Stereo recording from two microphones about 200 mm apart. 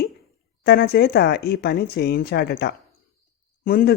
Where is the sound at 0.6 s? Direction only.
50° left (ahead or behind).